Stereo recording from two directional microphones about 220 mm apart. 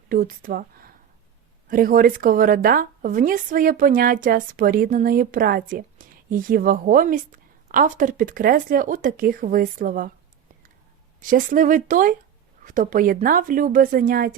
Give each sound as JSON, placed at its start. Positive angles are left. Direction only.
{"t": 0.1, "sound": "speech", "side_deg": -40}
{"t": 11.2, "sound": "speech", "side_deg": -40}